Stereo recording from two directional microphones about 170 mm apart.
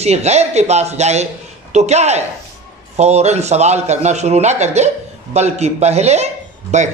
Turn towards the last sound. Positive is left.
turn(degrees=-40)  # may be behind; listen again after turning